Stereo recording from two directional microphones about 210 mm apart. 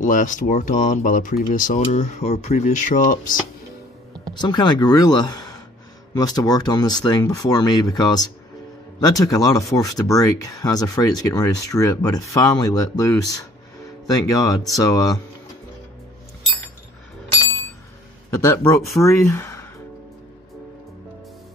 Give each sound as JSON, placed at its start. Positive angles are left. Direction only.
{"t": 0.0, "sound": "speech", "side_deg": 40}
{"t": 4.3, "sound": "speech", "side_deg": 20}
{"t": 18.3, "sound": "speech", "side_deg": 15}